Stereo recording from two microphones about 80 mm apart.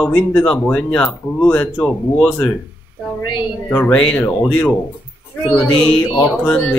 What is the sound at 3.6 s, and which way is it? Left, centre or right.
Speech, left.